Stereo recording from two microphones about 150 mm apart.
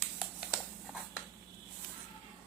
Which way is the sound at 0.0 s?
5° right (ahead or behind).